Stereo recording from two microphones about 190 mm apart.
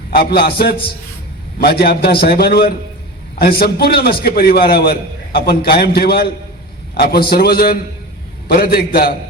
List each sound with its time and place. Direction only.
0.1 s a man's voice: 60° left (ahead or behind)